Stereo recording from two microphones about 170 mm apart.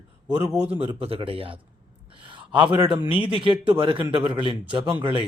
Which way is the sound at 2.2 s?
30° right (ahead or behind).